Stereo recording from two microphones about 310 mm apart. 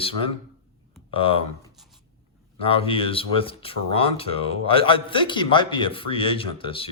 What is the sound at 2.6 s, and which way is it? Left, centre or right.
Speech, centre.